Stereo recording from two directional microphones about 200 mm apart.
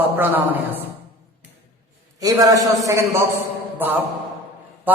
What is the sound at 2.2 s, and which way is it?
A man's voice, 20° right (ahead or behind).